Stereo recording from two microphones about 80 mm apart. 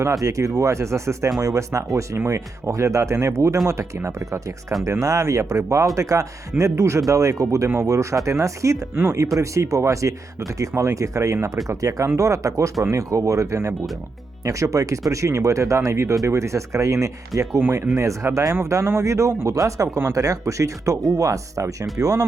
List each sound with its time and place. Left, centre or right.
0.0 s speech: right